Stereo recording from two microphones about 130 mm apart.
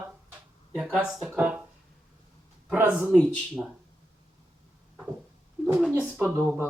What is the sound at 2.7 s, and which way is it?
Speech, 10° right (ahead or behind).